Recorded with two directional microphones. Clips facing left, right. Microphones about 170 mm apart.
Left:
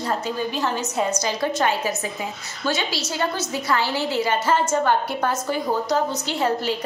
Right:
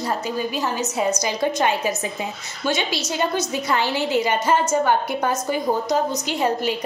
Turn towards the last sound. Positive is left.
turn(degrees=-15)  # may be behind; listen again after turning